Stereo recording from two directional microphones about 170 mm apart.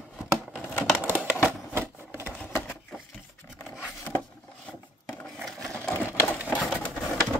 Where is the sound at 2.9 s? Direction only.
Centre (ahead or behind).